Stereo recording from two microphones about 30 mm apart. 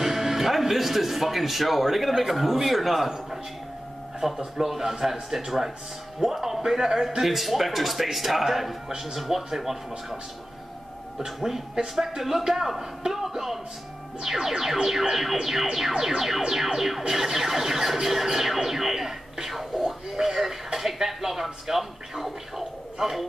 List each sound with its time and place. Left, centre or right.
0.0 s speech: centre
4.2 s speech: right
4.6 s music: centre
7.2 s speech: centre
9.0 s music: centre
11.4 s music: centre
19.8 s a man's voice: centre